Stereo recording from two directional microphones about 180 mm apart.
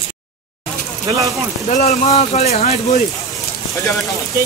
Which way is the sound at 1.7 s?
40° left (ahead or behind).